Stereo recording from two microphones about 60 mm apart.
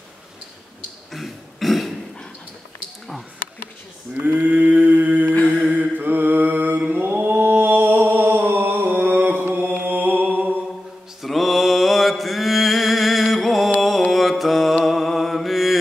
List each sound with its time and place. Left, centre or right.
1.1 s a sound: centre
4.1 s a sound: right
5.3 s mantra: left
5.7 s mantra: right
9.8 s music: right
11.2 s mantra: centre
13.7 s music: centre
14.1 s mantra: centre